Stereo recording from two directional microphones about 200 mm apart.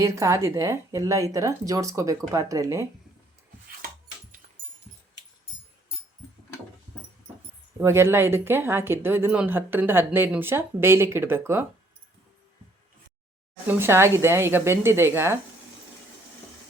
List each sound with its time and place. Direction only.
0.0 s a woman's voice: 15° right (ahead or behind)
7.8 s a woman's voice: 10° right (ahead or behind)
13.7 s a woman's voice: 10° right (ahead or behind)